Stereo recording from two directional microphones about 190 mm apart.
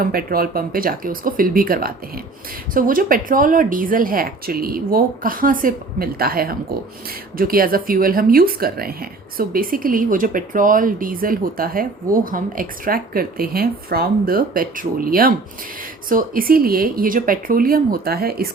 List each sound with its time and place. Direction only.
0.0 s speech: 50° right (ahead or behind)